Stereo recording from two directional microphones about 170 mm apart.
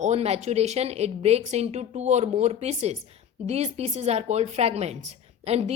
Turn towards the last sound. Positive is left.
turn(degrees=-40)  # may be behind; listen again after turning